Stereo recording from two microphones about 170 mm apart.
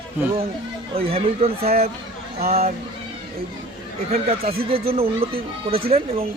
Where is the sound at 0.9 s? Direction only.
35° right (ahead or behind).